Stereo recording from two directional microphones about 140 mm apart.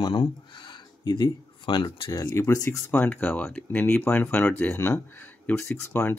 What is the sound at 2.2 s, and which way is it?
Speech, 20° left (ahead or behind).